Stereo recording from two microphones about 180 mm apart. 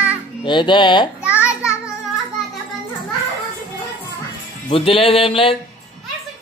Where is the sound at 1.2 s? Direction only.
5° right (ahead or behind).